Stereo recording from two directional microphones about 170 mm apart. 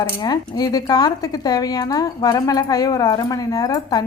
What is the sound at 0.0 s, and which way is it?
Speech, 25° left (ahead or behind).